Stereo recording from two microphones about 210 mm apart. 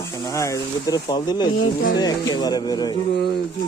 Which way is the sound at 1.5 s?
65° left (ahead or behind).